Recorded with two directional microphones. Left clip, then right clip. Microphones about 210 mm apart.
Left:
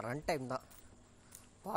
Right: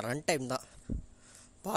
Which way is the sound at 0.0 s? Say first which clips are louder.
Right 5 dB; 45° right (ahead or behind).